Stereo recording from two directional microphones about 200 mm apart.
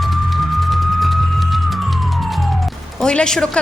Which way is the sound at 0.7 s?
Centre (ahead or behind).